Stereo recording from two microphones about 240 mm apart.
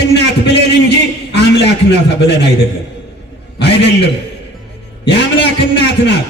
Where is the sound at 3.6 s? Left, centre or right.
Left.